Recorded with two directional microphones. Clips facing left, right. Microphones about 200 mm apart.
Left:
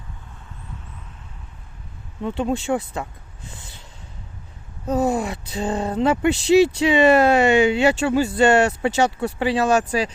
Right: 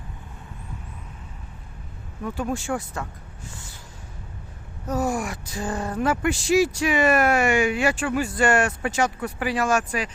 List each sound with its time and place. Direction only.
2.2 s speech: 25° left (ahead or behind)
4.9 s speech: 20° left (ahead or behind)